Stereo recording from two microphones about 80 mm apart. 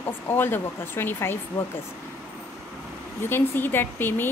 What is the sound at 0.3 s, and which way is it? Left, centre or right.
A woman's voice, left.